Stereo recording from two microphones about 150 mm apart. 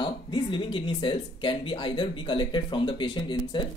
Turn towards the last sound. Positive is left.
turn(degrees=30)  # may be behind; listen again after turning